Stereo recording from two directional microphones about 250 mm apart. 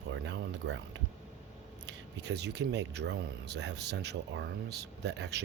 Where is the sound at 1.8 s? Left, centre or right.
Right.